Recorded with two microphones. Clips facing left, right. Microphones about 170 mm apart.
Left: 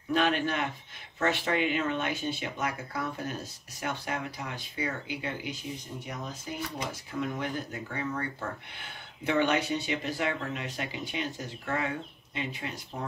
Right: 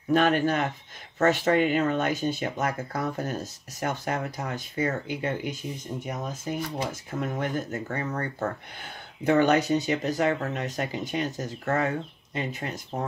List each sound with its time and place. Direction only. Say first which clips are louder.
0.1 s speech: right 5 dB; 45° right (ahead or behind)